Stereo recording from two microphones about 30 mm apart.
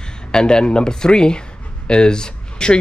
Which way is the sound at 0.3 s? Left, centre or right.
Left.